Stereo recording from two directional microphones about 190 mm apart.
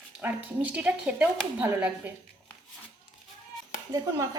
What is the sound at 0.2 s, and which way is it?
Speech, 10° right (ahead or behind).